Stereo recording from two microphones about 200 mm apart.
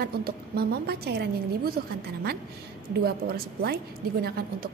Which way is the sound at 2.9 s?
50° right (ahead or behind).